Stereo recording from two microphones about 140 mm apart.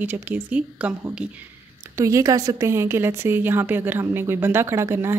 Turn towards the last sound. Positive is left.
turn(degrees=-20)  # may be behind; listen again after turning